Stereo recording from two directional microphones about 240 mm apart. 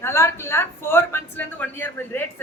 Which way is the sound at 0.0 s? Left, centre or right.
Centre.